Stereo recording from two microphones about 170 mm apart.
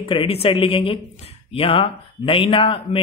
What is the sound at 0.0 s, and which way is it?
A man's voice, 30° left (ahead or behind).